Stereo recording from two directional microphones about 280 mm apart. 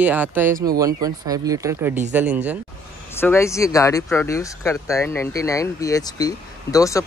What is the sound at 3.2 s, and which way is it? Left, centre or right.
Speech, centre.